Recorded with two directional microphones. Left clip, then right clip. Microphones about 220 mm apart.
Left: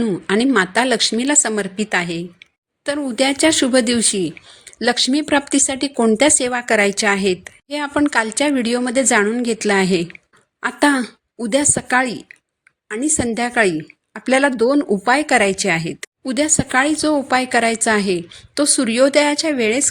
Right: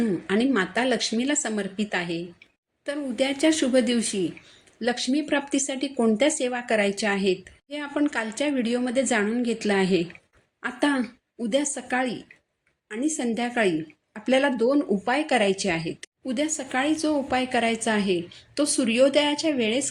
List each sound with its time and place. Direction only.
0.0 s a woman's voice: 40° left (ahead or behind)